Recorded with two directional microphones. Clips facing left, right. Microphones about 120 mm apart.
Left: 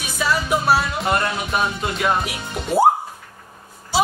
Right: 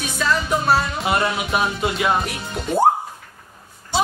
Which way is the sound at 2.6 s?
Centre (ahead or behind).